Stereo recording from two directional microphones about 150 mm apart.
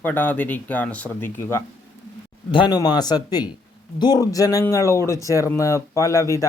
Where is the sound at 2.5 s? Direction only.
30° left (ahead or behind).